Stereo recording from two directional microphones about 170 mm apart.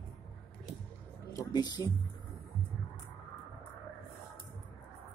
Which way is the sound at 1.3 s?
20° left (ahead or behind).